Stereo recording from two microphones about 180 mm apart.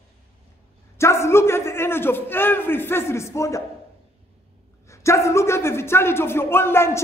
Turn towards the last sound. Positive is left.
turn(degrees=15)  # may be behind; listen again after turning